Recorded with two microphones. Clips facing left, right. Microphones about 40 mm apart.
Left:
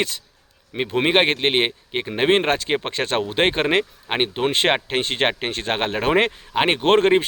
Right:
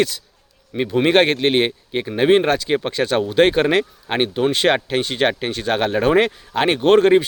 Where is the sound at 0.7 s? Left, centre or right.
Left.